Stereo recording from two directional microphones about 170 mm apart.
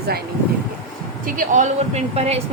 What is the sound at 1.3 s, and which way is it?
Speech, 50° right (ahead or behind).